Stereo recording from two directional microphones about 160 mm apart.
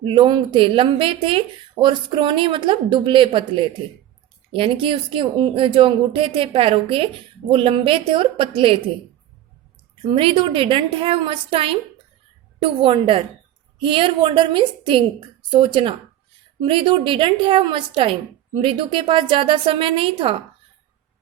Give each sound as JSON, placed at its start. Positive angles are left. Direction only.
{"t": 0.0, "sound": "a woman's voice", "side_deg": -30}
{"t": 10.0, "sound": "a woman's voice", "side_deg": -30}